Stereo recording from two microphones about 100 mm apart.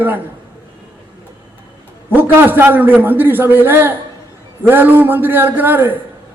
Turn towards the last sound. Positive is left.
turn(degrees=-20)  # may be behind; listen again after turning